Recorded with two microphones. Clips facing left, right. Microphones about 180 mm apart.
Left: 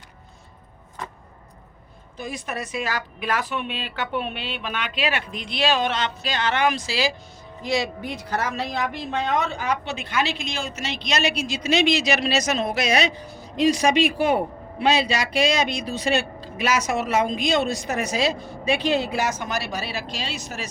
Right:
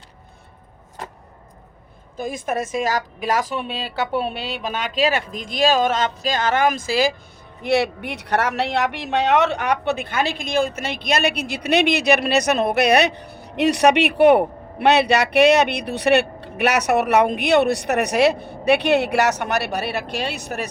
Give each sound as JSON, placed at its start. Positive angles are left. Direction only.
{"t": 2.1, "sound": "a woman's voice", "side_deg": -50}
{"t": 7.6, "sound": "a woman's voice", "side_deg": -65}